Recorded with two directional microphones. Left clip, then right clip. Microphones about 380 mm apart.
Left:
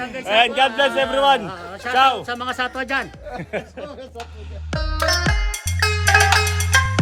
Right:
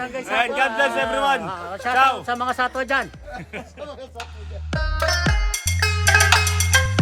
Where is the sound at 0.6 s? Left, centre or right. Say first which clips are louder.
Left 3 dB; centre.